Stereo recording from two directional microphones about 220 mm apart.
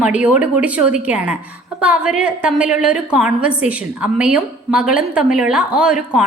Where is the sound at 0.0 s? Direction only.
5° right (ahead or behind).